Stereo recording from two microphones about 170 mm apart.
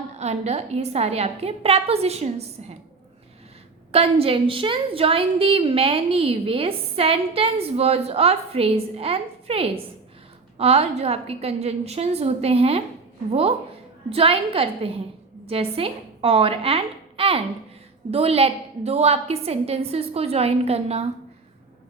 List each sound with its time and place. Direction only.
0.2 s a woman's voice: 40° right (ahead or behind)
3.9 s a woman's voice: 35° right (ahead or behind)
14.1 s a woman's voice: 35° right (ahead or behind)